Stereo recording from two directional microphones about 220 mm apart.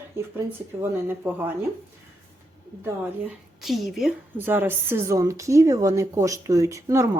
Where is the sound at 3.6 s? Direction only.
Centre (ahead or behind).